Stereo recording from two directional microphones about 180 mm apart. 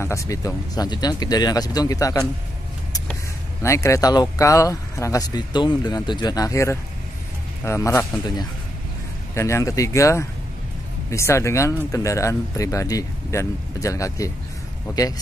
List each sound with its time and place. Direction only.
0.0 s speech: 15° left (ahead or behind)
3.6 s speech: 15° left (ahead or behind)